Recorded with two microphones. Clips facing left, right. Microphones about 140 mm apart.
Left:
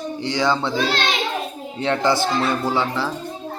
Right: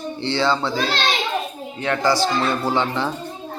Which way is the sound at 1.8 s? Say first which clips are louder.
Left 1 dB; 25° left (ahead or behind).